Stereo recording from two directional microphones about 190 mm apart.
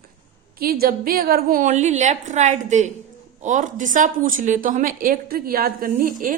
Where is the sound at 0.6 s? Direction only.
50° right (ahead or behind).